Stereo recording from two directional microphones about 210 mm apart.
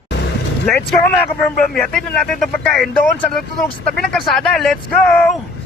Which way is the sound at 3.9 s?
Centre (ahead or behind).